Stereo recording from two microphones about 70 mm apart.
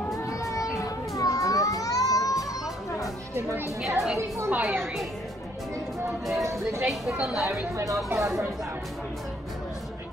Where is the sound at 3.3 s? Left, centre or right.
Right.